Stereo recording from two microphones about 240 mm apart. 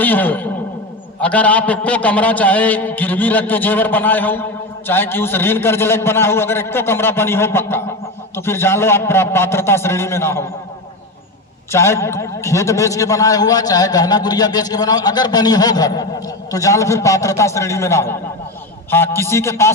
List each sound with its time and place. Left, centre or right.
0.0 s a man's voice: centre
11.7 s a man's voice: centre